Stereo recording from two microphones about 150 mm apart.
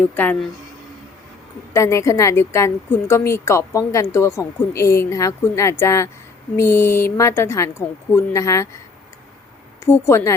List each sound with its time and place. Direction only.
0.1 s a woman's voice: 10° left (ahead or behind)
1.7 s a woman's voice: 20° left (ahead or behind)
9.8 s a woman's voice: 15° left (ahead or behind)